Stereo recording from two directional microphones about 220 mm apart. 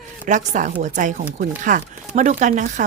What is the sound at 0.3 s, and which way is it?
A woman's voice, 35° right (ahead or behind).